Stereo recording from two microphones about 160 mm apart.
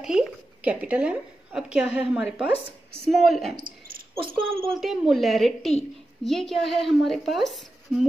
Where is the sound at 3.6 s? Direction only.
60° right (ahead or behind).